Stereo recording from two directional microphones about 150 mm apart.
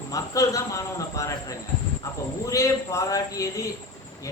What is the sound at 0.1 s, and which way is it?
A man's voice, 20° left (ahead or behind).